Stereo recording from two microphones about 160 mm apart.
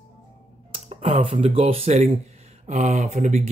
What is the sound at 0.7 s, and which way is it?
Speech, 35° right (ahead or behind).